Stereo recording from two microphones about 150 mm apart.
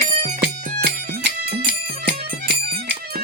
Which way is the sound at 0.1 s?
50° right (ahead or behind).